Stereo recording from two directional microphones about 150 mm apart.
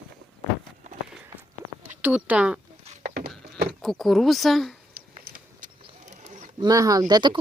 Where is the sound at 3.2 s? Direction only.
90° right.